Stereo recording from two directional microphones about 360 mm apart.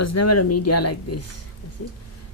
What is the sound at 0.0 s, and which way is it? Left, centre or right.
Speech, left.